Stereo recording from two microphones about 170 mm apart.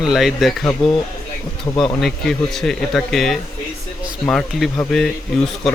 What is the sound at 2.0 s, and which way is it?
Speech, centre (ahead or behind).